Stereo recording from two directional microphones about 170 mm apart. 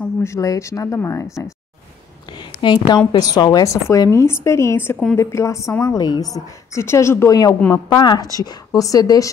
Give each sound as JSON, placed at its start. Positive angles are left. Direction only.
{"t": 0.0, "sound": "a woman's voice", "side_deg": 15}
{"t": 2.3, "sound": "a sound", "side_deg": 25}
{"t": 3.1, "sound": "a woman's voice", "side_deg": 25}